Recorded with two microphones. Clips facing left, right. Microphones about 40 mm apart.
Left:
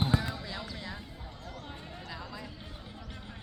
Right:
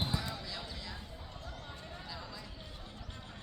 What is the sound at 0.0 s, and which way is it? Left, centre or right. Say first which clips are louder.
Basketball bounce: left 6 dB; left.